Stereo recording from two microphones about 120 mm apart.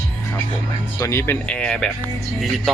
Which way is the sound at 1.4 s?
10° left (ahead or behind).